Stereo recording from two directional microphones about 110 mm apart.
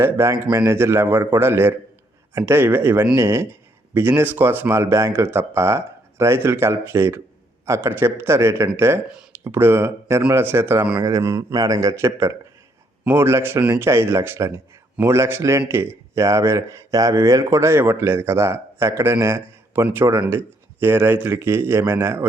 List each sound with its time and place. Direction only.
0.0 s a man's voice: 25° right (ahead or behind)